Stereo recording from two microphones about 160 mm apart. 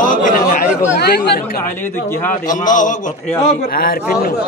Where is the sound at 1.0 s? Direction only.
75° left (ahead or behind).